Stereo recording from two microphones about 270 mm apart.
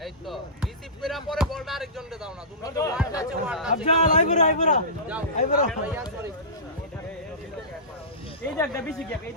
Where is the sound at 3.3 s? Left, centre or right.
Centre.